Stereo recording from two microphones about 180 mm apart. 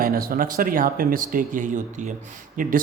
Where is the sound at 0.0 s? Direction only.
55° right (ahead or behind).